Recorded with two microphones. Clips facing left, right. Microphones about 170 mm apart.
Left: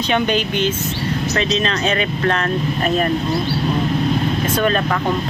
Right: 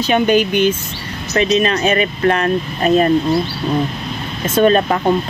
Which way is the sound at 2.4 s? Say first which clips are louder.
Right 3 dB; 25° right (ahead or behind).